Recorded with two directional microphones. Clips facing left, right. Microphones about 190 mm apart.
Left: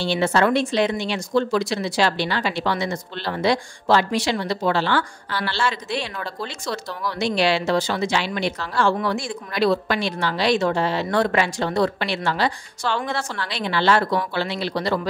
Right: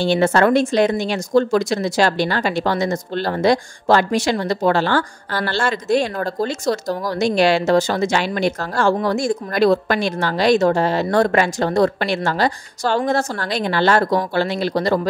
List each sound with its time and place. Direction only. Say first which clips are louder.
0.0 s speech: right 4 dB; 50° right (ahead or behind)